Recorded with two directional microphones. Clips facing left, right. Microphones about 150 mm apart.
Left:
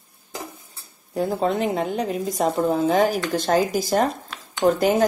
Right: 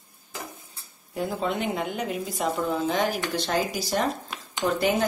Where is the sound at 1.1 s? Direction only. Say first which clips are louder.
Left 5 dB; 35° left (ahead or behind).